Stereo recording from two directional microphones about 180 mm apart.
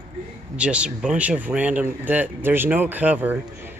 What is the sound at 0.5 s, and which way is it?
Speech, 5° right (ahead or behind).